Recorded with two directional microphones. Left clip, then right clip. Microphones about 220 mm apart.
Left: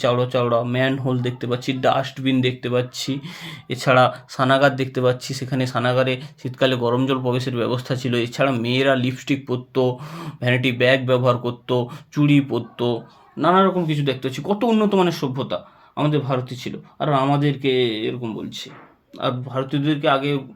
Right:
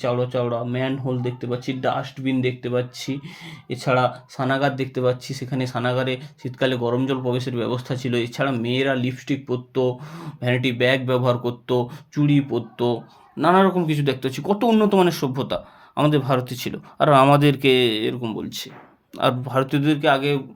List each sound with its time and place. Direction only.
0.0 s speech: 15° left (ahead or behind); by 11.9 s centre (ahead or behind)
12.1 s speech: 10° left (ahead or behind)
13.4 s speech: 15° right (ahead or behind)